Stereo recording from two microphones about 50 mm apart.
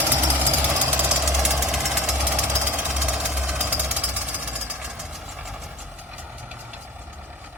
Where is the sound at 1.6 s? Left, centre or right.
Centre.